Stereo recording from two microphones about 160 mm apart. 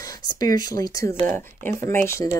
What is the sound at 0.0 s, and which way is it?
Speech, 25° left (ahead or behind).